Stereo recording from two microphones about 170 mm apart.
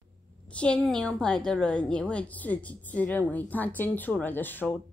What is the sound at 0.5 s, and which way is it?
A woman's voice, 5° left (ahead or behind).